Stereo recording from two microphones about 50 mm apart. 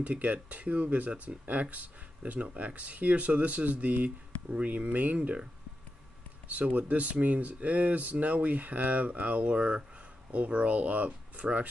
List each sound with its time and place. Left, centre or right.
0.0 s speech: right
6.5 s speech: right